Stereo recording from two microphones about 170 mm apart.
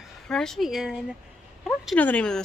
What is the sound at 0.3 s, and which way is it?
Speech, 5° left (ahead or behind).